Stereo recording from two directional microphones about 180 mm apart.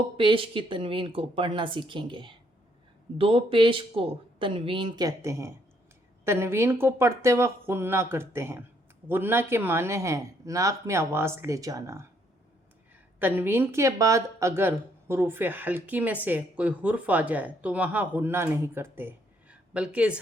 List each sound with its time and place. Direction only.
0.2 s speech: 30° right (ahead or behind)
13.1 s speech: 10° right (ahead or behind)